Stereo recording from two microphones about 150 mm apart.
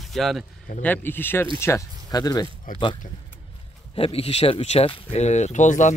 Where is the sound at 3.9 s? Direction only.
40° left (ahead or behind).